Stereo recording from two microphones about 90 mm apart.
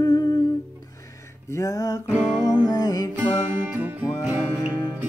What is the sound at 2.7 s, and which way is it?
Music, 40° left (ahead or behind).